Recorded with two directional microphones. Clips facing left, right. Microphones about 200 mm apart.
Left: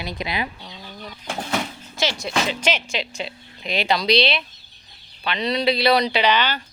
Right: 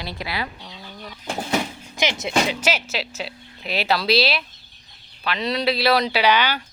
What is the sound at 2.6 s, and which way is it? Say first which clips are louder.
A woman's voice: even; 5° right (ahead or behind).